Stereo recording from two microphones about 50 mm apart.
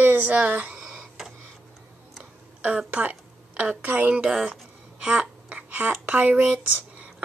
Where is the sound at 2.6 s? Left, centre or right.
Right.